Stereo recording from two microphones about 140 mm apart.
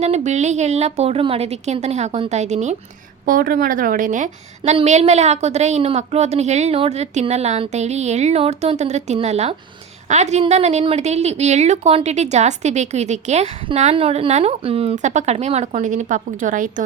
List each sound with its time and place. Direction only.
0.0 s a woman's voice: 55° right (ahead or behind)
3.2 s a woman's voice: 85° right; by 14.9 s 45° right (ahead or behind)
14.9 s speech: 60° right (ahead or behind)